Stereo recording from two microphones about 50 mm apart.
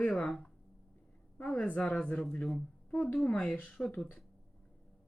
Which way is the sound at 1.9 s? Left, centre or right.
Centre.